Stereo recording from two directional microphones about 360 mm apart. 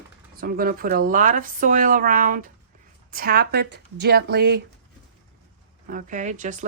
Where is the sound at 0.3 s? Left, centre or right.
Right.